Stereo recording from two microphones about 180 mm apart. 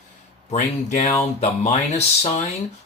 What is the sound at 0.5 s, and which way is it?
Speech, 45° left (ahead or behind).